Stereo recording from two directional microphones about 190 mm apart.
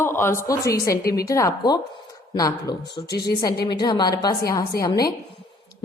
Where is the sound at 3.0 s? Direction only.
60° left (ahead or behind).